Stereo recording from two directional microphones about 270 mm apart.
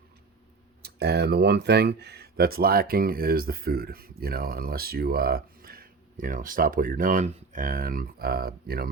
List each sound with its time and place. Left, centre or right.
0.8 s speech: right